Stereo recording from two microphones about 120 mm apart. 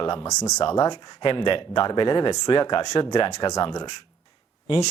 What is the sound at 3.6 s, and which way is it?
Speech, 40° left (ahead or behind).